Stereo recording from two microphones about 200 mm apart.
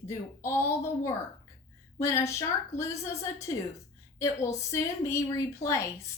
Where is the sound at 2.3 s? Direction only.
15° left (ahead or behind).